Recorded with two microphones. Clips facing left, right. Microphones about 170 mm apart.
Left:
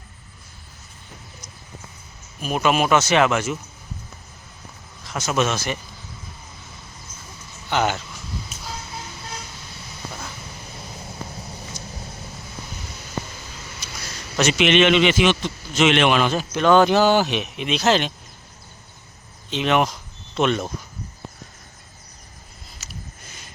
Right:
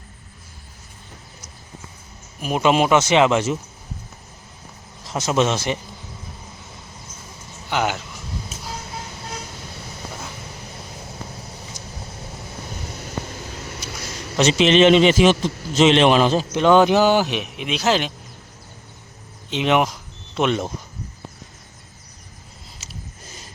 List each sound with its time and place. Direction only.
2.4 s a man's voice: 20° right (ahead or behind)
5.0 s a man's voice: 30° right (ahead or behind)
7.7 s speech: 10° right (ahead or behind)
14.3 s a man's voice: 30° right (ahead or behind); by 18.1 s 10° right (ahead or behind)
19.5 s speech: 20° right (ahead or behind)
22.8 s a sound: 25° right (ahead or behind)